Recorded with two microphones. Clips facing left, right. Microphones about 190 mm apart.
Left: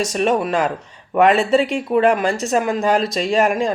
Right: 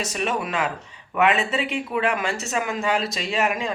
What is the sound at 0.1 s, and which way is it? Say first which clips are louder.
Speech: left 8 dB; 40° left (ahead or behind).